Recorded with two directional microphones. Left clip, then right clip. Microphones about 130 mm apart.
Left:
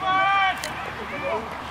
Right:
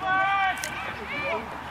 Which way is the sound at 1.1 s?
45° left (ahead or behind).